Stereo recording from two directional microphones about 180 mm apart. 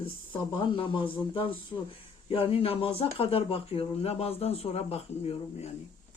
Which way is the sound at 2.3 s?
30° left (ahead or behind).